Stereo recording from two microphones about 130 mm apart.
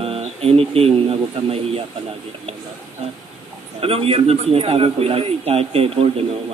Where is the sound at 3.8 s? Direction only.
45° right (ahead or behind).